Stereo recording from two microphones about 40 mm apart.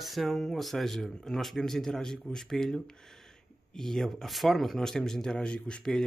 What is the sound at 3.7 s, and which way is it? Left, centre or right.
Speech, centre.